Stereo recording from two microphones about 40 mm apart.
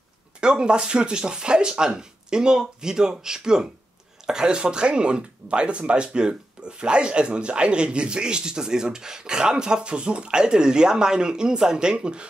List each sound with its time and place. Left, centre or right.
0.4 s speech: right